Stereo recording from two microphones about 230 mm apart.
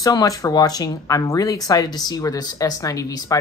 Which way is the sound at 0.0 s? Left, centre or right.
Centre.